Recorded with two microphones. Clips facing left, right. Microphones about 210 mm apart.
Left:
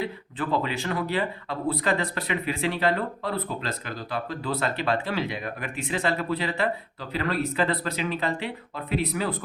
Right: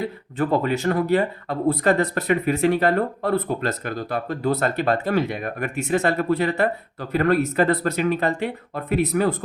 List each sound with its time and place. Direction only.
0.3 s speech: 45° right (ahead or behind)